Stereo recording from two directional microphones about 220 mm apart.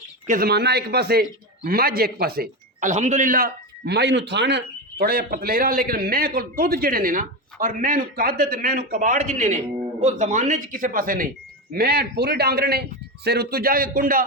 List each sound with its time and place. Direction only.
0.3 s a man's voice: 45° right (ahead or behind)